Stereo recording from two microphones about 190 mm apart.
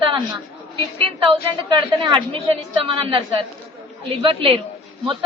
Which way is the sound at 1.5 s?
25° right (ahead or behind).